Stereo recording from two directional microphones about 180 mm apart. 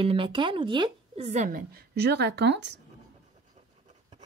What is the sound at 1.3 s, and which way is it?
A woman's voice, 45° right (ahead or behind).